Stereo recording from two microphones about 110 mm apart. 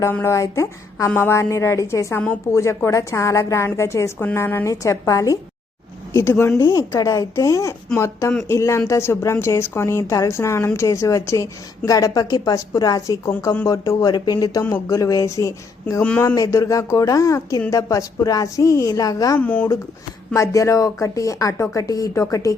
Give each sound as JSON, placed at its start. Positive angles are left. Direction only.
{"t": 0.0, "sound": "speech", "side_deg": 25}
{"t": 19.4, "sound": "speech", "side_deg": 15}
{"t": 20.3, "sound": "speech", "side_deg": 30}